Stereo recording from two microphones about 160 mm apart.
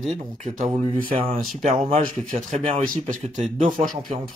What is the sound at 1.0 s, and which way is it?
Speech, 35° right (ahead or behind).